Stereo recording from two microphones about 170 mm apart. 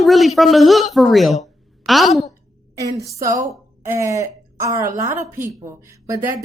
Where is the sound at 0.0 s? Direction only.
Centre (ahead or behind).